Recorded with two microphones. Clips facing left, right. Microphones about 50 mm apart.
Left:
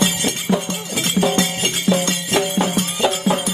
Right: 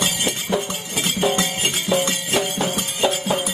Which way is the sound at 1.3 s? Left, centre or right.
Right.